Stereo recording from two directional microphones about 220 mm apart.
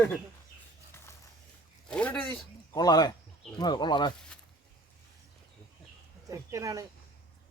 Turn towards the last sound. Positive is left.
turn(degrees=-15)  # may be behind; listen again after turning